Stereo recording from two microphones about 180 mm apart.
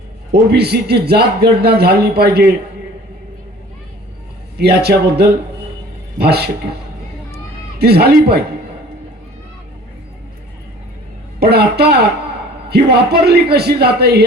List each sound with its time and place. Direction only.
0.3 s speech: 65° right (ahead or behind)
4.5 s speech: 65° right (ahead or behind)
7.8 s speech: 60° right (ahead or behind)
11.3 s speech: 65° right (ahead or behind)